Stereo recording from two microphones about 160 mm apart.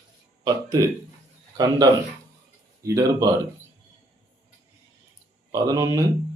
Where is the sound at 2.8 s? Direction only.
20° right (ahead or behind).